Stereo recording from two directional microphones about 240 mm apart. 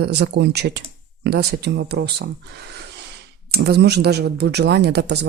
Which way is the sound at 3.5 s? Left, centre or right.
Right.